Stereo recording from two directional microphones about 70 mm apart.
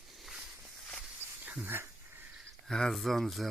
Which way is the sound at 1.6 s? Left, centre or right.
Right.